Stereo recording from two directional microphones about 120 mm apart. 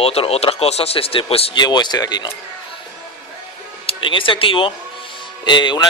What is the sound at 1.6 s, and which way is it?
Speech, 35° left (ahead or behind).